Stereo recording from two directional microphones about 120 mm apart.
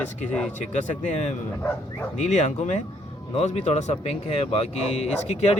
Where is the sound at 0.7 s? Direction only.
75° left (ahead or behind).